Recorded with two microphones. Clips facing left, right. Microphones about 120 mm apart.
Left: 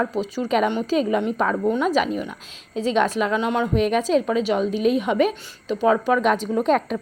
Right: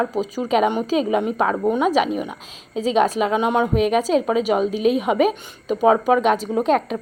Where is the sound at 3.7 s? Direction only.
5° right (ahead or behind).